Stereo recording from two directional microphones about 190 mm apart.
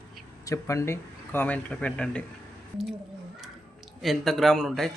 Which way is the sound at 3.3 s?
Centre (ahead or behind).